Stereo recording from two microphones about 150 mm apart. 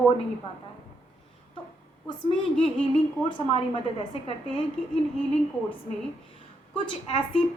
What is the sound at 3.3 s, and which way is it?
Speech, 35° left (ahead or behind).